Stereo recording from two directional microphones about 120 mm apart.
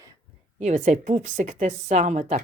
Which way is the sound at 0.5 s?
75° right (ahead or behind).